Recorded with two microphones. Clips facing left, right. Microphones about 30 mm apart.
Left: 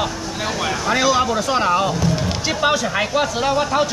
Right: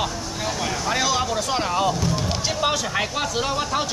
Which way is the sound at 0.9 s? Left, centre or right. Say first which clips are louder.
Left 6 dB; centre.